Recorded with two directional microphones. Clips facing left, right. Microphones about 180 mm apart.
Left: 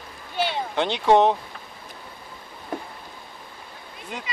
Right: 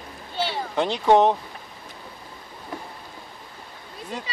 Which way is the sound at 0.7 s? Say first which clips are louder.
Right 1 dB; centre (ahead or behind).